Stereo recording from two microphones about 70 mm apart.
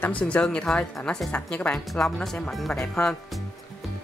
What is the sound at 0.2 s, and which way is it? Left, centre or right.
Speech, centre.